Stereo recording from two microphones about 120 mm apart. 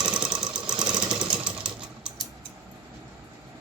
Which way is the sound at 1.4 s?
10° right (ahead or behind).